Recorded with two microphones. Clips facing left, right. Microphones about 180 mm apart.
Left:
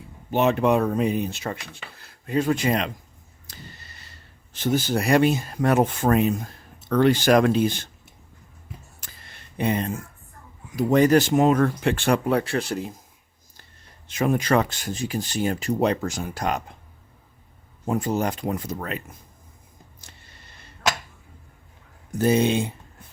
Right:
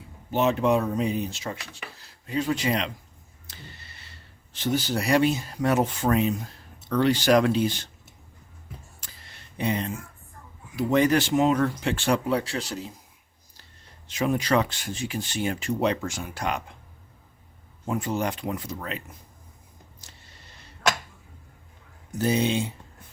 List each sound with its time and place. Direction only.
0.3 s speech: 60° left (ahead or behind)
3.5 s a sound: 40° left (ahead or behind)
4.5 s speech: 50° left (ahead or behind)
9.0 s a sound: 55° left (ahead or behind)
10.8 s speech: 40° left (ahead or behind)
14.1 s speech: 50° left (ahead or behind)
17.8 s speech: 40° left (ahead or behind)
22.2 s speech: 50° left (ahead or behind)